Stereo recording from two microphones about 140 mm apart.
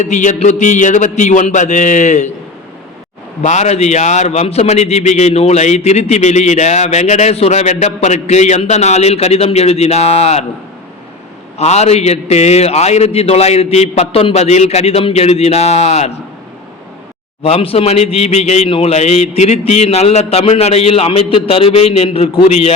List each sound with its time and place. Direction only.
0.0 s a man's voice: 60° left (ahead or behind)
3.4 s a man's voice: 55° left (ahead or behind)
11.5 s a man's voice: 50° left (ahead or behind)
17.4 s a man's voice: 45° left (ahead or behind)